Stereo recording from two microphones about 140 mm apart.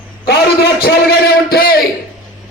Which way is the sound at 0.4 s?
90° left.